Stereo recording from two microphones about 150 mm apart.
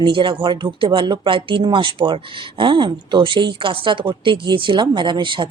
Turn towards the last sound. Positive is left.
turn(degrees=-35)  # may be behind; listen again after turning